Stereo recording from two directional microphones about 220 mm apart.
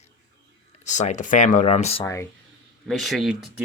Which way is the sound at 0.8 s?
35° left (ahead or behind).